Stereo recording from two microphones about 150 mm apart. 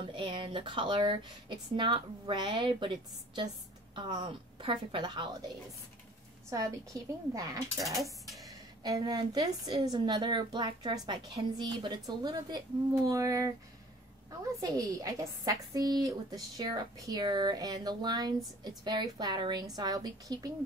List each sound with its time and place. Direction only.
0.1 s speech: 35° right (ahead or behind)
6.5 s a woman's voice: 25° right (ahead or behind)
7.8 s dishes: centre (ahead or behind)
8.8 s a woman's voice: 25° right (ahead or behind)
14.6 s a woman's voice: 25° right (ahead or behind)